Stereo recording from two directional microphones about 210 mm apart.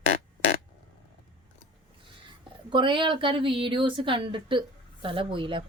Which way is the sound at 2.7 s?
25° right (ahead or behind).